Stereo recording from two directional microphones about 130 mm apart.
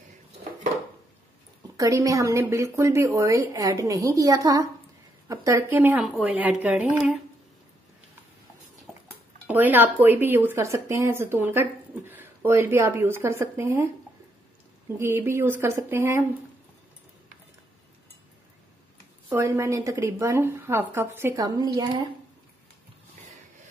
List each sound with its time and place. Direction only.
1.8 s a woman's voice: 25° right (ahead or behind)
6.0 s speech: 5° right (ahead or behind)
9.5 s speech: 15° right (ahead or behind)
15.0 s a woman's voice: 20° right (ahead or behind)
19.2 s a woman's voice: 25° right (ahead or behind)